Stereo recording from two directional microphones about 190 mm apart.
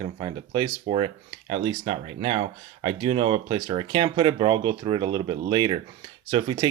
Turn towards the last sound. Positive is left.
turn(degrees=-25)  # may be behind; listen again after turning